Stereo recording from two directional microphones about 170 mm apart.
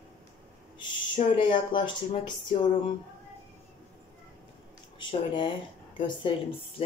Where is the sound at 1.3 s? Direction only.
30° left (ahead or behind).